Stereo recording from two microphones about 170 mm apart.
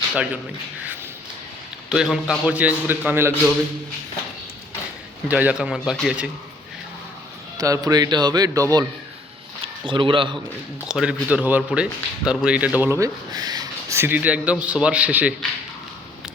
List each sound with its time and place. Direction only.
1.9 s speech: 5° right (ahead or behind)
5.3 s speech: 10° right (ahead or behind)
7.6 s speech: 20° right (ahead or behind)
9.8 s speech: 30° right (ahead or behind)
10.8 s speech: 5° right (ahead or behind)